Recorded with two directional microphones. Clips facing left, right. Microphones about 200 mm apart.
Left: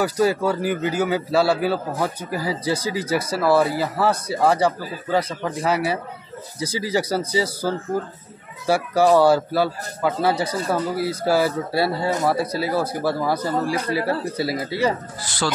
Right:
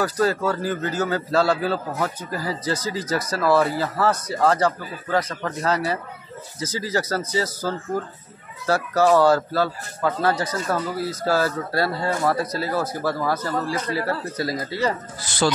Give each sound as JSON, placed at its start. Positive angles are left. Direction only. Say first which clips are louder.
{"t": 0.0, "sound": "speech", "louder": "left 2 dB", "side_deg": 10}
{"t": 12.1, "sound": "speech", "louder": "left 1 dB", "side_deg": 20}
{"t": 15.2, "sound": "speech", "louder": "right 4 dB", "side_deg": -20}